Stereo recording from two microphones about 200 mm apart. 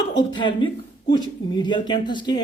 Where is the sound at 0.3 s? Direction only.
25° left (ahead or behind).